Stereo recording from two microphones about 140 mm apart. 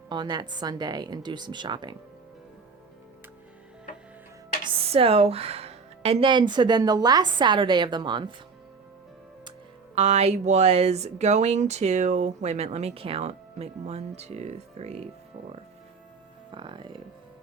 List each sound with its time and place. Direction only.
0.1 s speech: 30° right (ahead or behind)
4.6 s speech: 40° right (ahead or behind)
9.9 s speech: 50° right (ahead or behind)
16.5 s speech: 35° right (ahead or behind)